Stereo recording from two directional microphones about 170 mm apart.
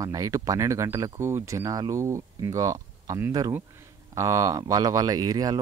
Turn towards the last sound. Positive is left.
turn(degrees=-20)  # may be behind; listen again after turning